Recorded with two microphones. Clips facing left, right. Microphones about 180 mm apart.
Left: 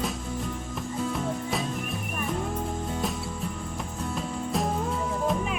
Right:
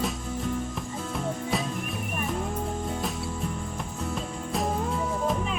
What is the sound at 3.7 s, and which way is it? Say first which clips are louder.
Music: even; centre (ahead or behind).